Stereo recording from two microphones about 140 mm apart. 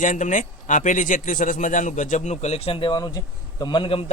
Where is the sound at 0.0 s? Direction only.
65° left (ahead or behind).